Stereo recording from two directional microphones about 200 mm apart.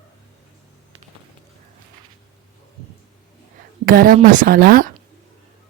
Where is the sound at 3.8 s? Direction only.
45° right (ahead or behind).